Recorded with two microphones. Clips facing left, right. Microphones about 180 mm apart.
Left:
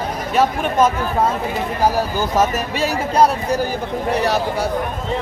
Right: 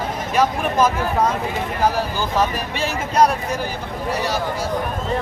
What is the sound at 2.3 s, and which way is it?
Speech, 40° left (ahead or behind).